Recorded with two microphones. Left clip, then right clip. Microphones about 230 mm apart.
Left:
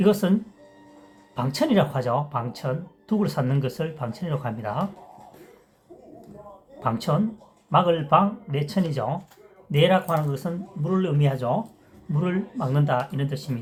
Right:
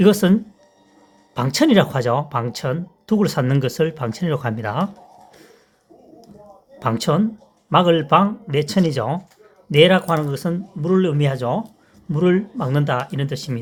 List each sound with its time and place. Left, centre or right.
0.0 s speech: right
1.4 s speech: right
6.7 s speech: right